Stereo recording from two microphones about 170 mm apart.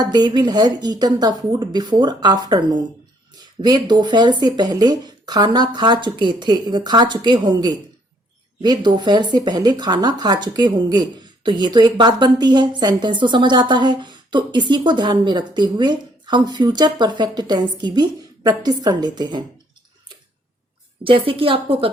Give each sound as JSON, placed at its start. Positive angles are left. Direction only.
{"t": 0.0, "sound": "speech", "side_deg": -25}
{"t": 21.0, "sound": "a woman's voice", "side_deg": -30}